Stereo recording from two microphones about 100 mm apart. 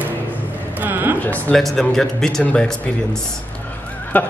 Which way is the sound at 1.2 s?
15° left (ahead or behind).